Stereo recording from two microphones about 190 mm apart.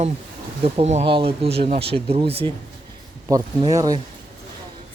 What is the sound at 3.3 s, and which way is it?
Speech, 20° right (ahead or behind).